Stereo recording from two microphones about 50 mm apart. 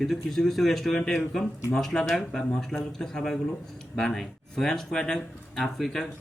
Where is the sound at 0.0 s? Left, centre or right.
Centre.